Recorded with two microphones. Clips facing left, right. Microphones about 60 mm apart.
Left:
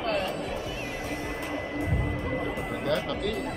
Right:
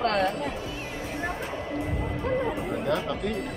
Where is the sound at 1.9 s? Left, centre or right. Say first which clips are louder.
Right 2 dB; centre.